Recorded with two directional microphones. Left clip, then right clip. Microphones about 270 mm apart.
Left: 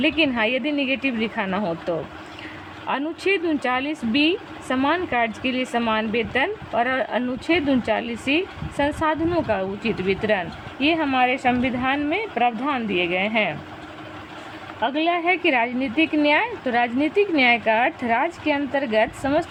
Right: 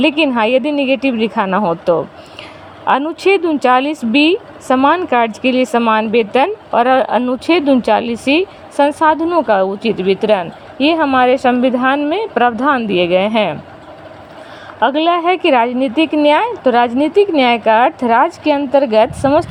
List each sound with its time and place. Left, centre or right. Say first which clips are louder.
0.0 s speech: right 7 dB; right
14.8 s speech: right 9 dB; right